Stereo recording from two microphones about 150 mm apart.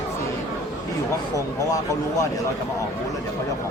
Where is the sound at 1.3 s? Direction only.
20° left (ahead or behind).